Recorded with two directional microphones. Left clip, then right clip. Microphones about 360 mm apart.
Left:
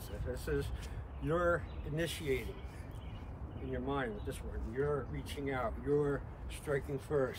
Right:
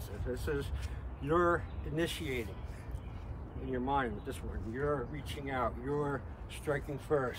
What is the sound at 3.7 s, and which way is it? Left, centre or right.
Speech, centre.